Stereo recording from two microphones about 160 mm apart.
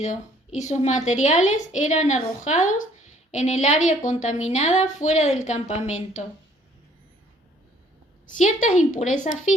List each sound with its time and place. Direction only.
0.0 s a woman's voice: 50° left (ahead or behind)
8.3 s a woman's voice: 50° left (ahead or behind)